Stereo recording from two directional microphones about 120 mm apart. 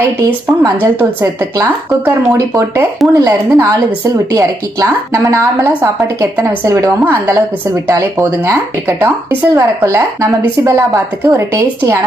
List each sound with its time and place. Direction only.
0.2 s speech: 15° right (ahead or behind)